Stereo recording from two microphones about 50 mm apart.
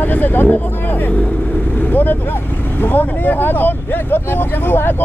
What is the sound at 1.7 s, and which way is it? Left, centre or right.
Vehicle, left.